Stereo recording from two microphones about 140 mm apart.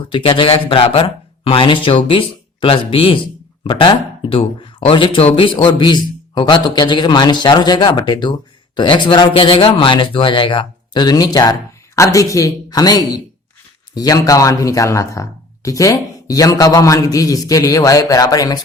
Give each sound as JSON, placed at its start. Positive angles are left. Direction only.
{"t": 0.1, "sound": "a man's voice", "side_deg": 40}